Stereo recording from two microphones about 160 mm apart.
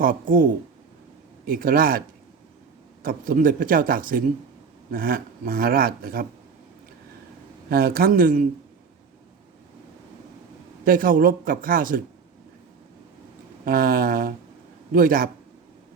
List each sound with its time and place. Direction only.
0.0 s speech: 60° right (ahead or behind)
1.5 s speech: 65° right (ahead or behind)
7.7 s speech: 65° right (ahead or behind)
10.8 s speech: 60° right (ahead or behind)
13.7 s speech: 65° right (ahead or behind)